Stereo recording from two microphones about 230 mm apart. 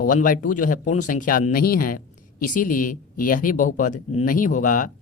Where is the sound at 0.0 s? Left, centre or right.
Left.